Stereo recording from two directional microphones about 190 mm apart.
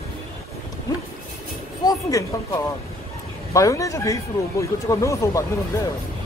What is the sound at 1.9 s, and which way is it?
Speech, 15° left (ahead or behind).